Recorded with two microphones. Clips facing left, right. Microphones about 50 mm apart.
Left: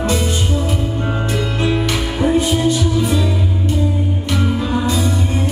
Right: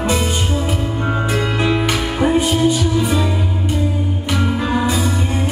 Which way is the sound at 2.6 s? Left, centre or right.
Centre.